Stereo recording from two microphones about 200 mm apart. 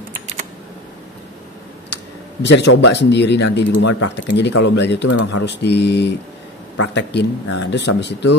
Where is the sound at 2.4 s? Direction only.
60° left (ahead or behind).